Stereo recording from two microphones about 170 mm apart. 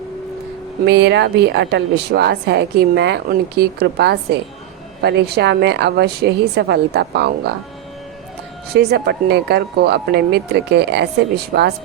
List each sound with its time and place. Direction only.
0.9 s a woman's voice: 85° right
8.7 s a woman's voice: 70° right (ahead or behind)